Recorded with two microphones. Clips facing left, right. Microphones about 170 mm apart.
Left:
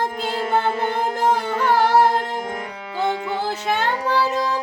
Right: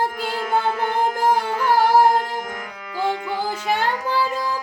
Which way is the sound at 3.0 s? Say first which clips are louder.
Left 1 dB; 25° left (ahead or behind).